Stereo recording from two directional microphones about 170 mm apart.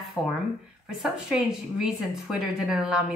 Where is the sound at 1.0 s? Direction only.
5° right (ahead or behind).